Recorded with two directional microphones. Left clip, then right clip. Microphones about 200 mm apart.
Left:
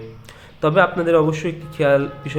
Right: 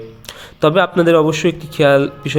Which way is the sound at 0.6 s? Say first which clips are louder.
Right 4 dB; 40° right (ahead or behind).